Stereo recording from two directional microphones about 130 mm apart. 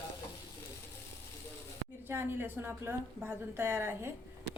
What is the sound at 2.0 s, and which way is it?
A woman's voice, 15° right (ahead or behind).